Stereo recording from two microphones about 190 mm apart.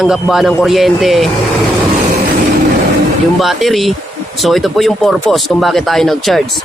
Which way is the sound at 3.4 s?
Centre (ahead or behind).